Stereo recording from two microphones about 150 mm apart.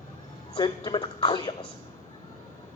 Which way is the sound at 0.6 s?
30° left (ahead or behind).